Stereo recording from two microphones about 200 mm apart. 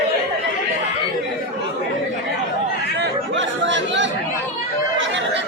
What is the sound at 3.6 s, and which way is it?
Chatter, 65° right (ahead or behind).